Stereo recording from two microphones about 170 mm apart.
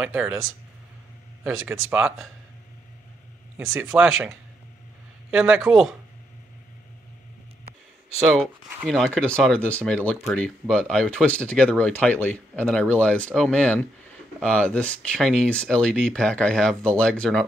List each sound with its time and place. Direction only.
0.0 s speech: 5° right (ahead or behind)
1.4 s speech: 10° right (ahead or behind)
3.7 s speech: 5° right (ahead or behind)
8.2 s speech: centre (ahead or behind)